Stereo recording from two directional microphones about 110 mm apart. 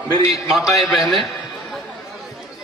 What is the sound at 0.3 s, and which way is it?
Speech, centre (ahead or behind).